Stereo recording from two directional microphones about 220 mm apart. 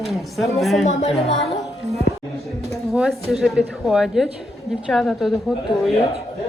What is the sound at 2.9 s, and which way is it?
A woman's voice, 5° right (ahead or behind).